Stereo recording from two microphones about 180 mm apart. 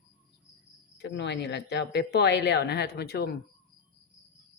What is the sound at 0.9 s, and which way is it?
Speech, 75° left (ahead or behind).